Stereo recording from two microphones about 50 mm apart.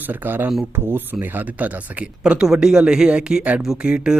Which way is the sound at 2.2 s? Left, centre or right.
Centre.